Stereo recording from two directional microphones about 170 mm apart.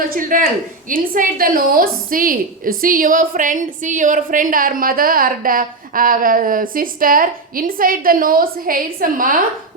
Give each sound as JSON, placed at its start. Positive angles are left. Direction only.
{"t": 0.1, "sound": "a woman's voice", "side_deg": -55}